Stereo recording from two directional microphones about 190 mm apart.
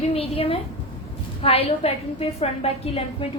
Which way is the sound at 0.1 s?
30° left (ahead or behind).